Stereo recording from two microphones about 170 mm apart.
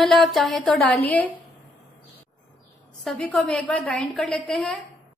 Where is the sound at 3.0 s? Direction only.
5° left (ahead or behind).